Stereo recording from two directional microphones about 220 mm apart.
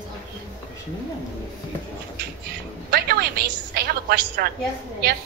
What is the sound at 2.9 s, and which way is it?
A woman's voice, 45° right (ahead or behind).